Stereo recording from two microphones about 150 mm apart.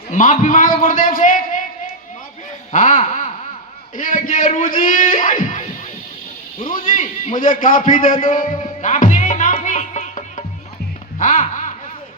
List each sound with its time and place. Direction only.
0.1 s a man's voice: 55° left (ahead or behind)
2.7 s a man's voice: 60° left (ahead or behind)
6.7 s a man's voice: 60° left (ahead or behind)
9.6 s music: 55° left (ahead or behind)
11.2 s a sound: 60° left (ahead or behind)